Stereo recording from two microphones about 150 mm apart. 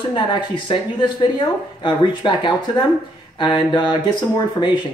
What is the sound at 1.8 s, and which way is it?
Speech, 30° left (ahead or behind).